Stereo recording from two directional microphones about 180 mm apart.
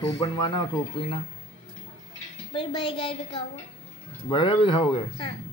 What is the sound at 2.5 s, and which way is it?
Speech, 30° left (ahead or behind).